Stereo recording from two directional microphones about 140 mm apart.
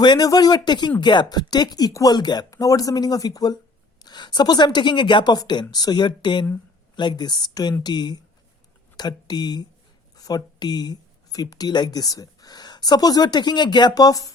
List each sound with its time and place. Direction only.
0.0 s a woman's voice: 30° left (ahead or behind)